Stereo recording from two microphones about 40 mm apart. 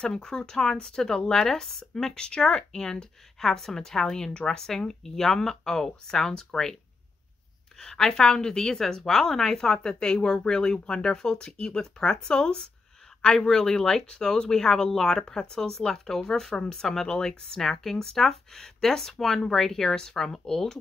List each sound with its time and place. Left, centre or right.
0.0 s speech: centre
2.1 s speech: centre
7.8 s speech: centre